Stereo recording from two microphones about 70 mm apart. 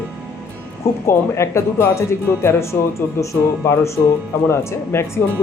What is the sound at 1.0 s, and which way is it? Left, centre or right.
Speech, left.